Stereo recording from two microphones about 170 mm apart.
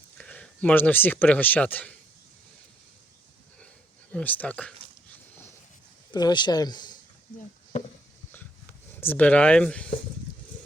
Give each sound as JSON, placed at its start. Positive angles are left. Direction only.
{"t": 0.2, "sound": "speech", "side_deg": 10}
{"t": 4.1, "sound": "speech", "side_deg": 10}
{"t": 6.1, "sound": "speech", "side_deg": 25}
{"t": 9.0, "sound": "speech", "side_deg": 10}